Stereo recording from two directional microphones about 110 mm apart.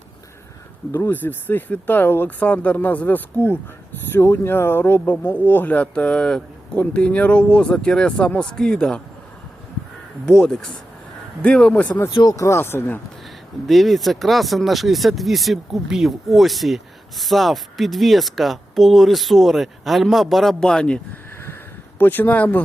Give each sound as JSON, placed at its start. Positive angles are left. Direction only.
{"t": 0.9, "sound": "speech", "side_deg": 15}
{"t": 10.2, "sound": "speech", "side_deg": 5}
{"t": 12.1, "sound": "speech", "side_deg": 35}
{"t": 13.7, "sound": "speech", "side_deg": 0}
{"t": 21.9, "sound": "speech", "side_deg": 15}